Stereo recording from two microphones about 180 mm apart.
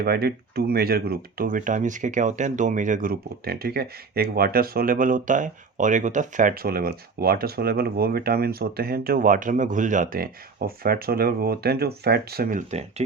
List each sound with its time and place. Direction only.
0.0 s speech: 60° right (ahead or behind)